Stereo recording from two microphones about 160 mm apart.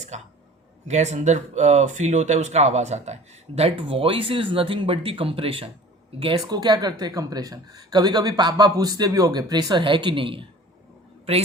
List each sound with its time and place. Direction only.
0.1 s speech: 45° right (ahead or behind)